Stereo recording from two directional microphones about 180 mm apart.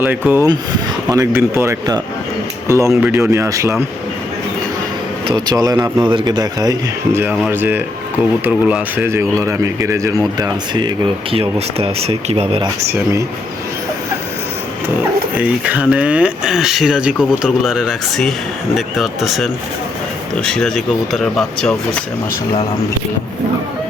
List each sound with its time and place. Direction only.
0.0 s speech: 10° right (ahead or behind)
5.3 s speech: 20° right (ahead or behind)
15.4 s speech: 5° right (ahead or behind)